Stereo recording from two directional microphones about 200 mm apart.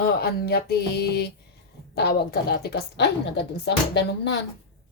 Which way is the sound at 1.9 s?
55° left (ahead or behind).